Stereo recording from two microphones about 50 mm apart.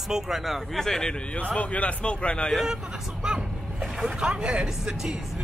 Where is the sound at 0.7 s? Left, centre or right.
Centre.